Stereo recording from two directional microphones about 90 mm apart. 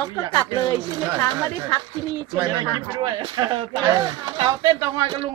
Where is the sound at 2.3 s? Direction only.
50° right (ahead or behind).